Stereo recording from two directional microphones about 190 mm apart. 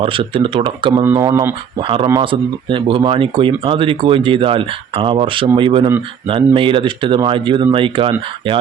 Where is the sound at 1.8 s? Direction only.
30° right (ahead or behind).